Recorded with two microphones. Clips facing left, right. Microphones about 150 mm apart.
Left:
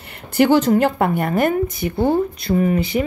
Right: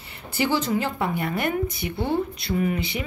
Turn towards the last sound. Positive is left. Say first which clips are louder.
# left 7 dB
turn(degrees=45)  # may be behind; listen again after turning